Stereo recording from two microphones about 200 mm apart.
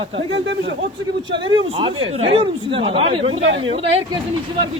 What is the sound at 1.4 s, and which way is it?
Speech, 25° right (ahead or behind).